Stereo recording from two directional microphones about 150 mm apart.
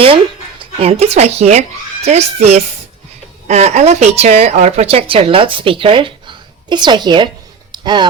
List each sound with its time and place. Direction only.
0.6 s a woman's voice: 40° right (ahead or behind)